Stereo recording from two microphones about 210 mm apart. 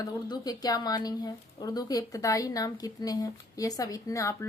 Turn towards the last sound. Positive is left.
turn(degrees=15)  # may be behind; listen again after turning